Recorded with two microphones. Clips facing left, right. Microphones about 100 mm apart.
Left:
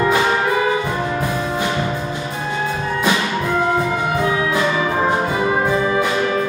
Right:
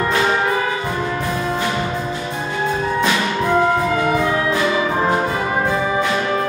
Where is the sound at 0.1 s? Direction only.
10° left (ahead or behind).